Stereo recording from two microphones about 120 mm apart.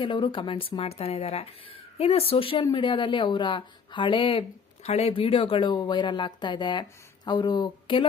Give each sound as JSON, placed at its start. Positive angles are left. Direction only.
{"t": 0.0, "sound": "speech", "side_deg": 40}